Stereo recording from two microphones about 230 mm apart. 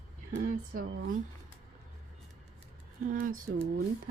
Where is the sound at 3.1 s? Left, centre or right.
Right.